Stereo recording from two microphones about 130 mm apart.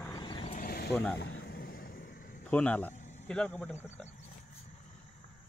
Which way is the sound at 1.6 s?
90° left.